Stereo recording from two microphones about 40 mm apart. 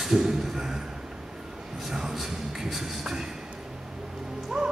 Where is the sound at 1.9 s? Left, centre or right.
Centre.